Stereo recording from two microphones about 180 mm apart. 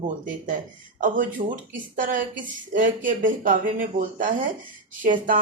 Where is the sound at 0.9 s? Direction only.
50° right (ahead or behind).